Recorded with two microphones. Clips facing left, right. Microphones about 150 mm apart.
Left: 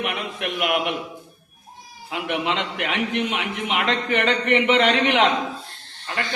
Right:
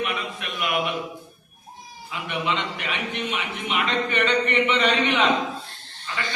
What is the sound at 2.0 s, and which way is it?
A man's voice, 85° left.